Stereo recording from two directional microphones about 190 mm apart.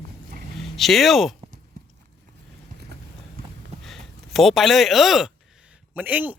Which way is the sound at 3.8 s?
Centre (ahead or behind).